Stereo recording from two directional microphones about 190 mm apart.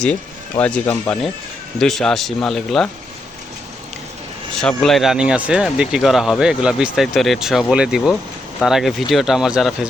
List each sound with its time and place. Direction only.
0.0 s speech: 5° left (ahead or behind)
4.8 s speech: centre (ahead or behind)